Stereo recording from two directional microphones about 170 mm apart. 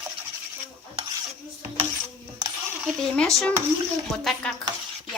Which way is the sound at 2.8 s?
5° left (ahead or behind).